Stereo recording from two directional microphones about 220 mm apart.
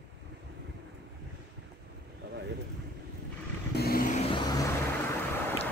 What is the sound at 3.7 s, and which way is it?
Vehicle, 45° left (ahead or behind).